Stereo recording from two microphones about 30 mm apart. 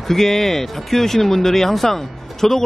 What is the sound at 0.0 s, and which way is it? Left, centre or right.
Speech, centre.